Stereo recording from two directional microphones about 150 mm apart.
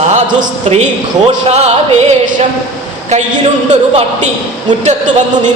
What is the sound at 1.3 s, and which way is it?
Music, 45° right (ahead or behind).